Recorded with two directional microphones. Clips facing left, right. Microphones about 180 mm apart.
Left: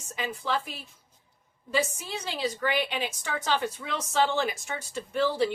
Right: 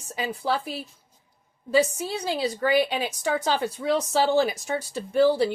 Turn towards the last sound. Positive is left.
turn(degrees=-35)  # may be behind; listen again after turning